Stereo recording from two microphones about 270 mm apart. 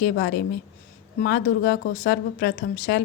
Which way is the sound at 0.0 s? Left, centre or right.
Left.